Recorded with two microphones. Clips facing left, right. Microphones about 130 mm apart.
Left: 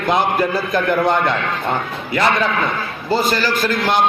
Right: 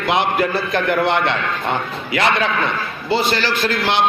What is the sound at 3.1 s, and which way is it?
Speech, 45° left (ahead or behind).